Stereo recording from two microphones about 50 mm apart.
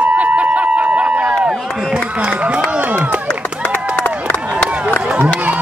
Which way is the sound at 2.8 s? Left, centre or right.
Right.